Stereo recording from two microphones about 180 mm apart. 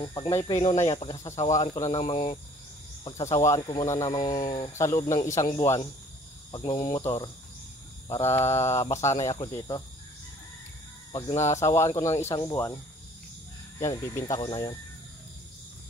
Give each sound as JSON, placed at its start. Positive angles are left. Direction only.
{"t": 0.0, "sound": "speech", "side_deg": 25}
{"t": 0.7, "sound": "speech", "side_deg": 35}
{"t": 11.1, "sound": "speech", "side_deg": 25}